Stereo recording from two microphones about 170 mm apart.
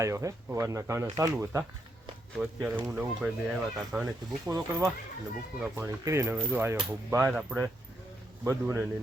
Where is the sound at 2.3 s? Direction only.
5° right (ahead or behind).